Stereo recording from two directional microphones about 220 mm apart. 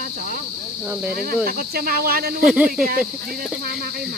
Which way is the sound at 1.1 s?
45° right (ahead or behind).